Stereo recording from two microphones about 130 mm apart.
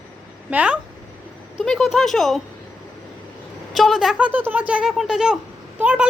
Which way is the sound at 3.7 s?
Centre (ahead or behind).